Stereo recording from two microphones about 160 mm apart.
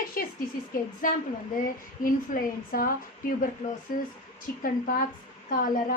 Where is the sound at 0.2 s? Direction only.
65° left (ahead or behind).